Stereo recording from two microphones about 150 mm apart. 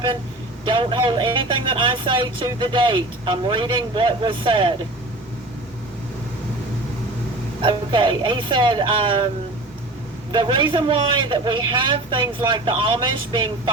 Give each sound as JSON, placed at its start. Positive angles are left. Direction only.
{"t": 0.7, "sound": "a man's voice", "side_deg": -35}
{"t": 7.6, "sound": "a man's voice", "side_deg": -35}
{"t": 10.3, "sound": "a man's voice", "side_deg": -35}